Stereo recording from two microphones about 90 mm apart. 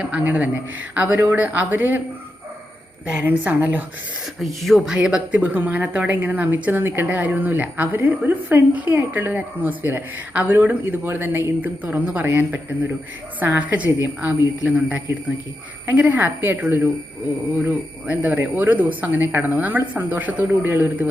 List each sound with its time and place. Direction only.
0.0 s a man's voice: 15° right (ahead or behind)
3.1 s a woman's voice: 20° right (ahead or behind)
4.4 s a woman's voice: centre (ahead or behind); by 21.1 s 20° right (ahead or behind)